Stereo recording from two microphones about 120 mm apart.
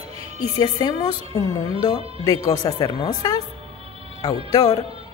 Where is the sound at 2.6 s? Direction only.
40° left (ahead or behind).